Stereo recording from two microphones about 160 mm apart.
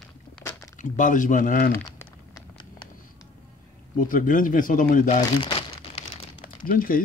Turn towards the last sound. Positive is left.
turn(degrees=60)  # may be behind; listen again after turning